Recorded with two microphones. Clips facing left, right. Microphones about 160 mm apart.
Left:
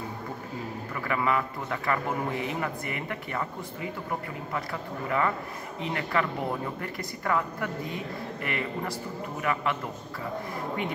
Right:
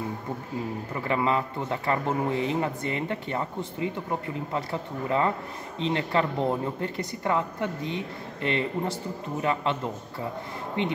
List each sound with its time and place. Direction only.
0.9 s speech: 25° right (ahead or behind)
5.8 s speech: 25° right (ahead or behind)
10.8 s speech: 25° right (ahead or behind)